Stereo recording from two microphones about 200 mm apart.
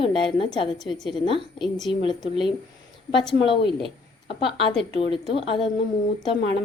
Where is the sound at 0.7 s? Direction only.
Centre (ahead or behind).